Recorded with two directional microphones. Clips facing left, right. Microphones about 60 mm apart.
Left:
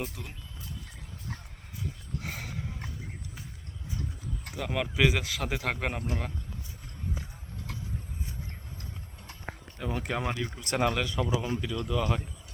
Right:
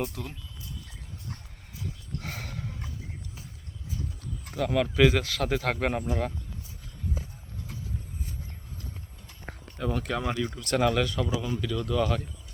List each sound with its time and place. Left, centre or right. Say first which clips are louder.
0.0 s speech: right 5 dB; centre
2.2 s a sound: right 1 dB; centre
4.5 s speech: right 5 dB; centre
9.7 s speech: right 4 dB; centre
10.0 s a man's voice: even; centre
11.8 s speech: right 4 dB; centre